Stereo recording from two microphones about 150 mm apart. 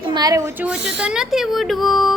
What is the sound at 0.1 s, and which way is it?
Speech, 25° right (ahead or behind).